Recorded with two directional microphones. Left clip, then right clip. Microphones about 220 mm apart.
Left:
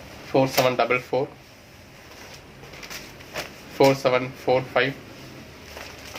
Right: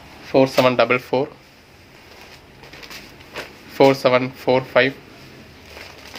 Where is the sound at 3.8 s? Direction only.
50° right (ahead or behind).